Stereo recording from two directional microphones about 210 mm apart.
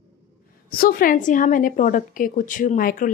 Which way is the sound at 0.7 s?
45° left (ahead or behind).